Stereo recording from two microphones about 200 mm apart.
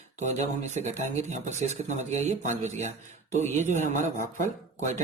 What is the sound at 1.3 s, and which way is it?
Speech, 35° right (ahead or behind).